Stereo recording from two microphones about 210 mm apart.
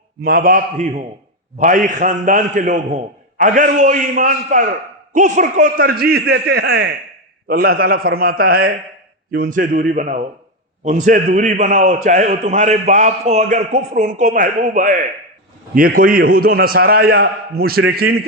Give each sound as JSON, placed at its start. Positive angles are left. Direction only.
{"t": 0.2, "sound": "a man's voice", "side_deg": -45}